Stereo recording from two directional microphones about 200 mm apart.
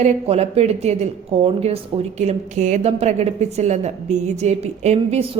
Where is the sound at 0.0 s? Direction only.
30° right (ahead or behind).